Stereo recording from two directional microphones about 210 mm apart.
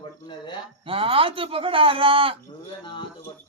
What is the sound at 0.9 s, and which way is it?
Speech, 25° right (ahead or behind).